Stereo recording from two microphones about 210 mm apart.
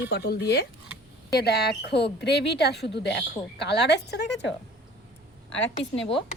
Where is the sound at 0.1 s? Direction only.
50° left (ahead or behind).